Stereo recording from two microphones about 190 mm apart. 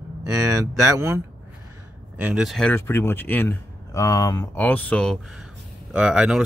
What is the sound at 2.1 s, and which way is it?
A man's voice, 5° right (ahead or behind).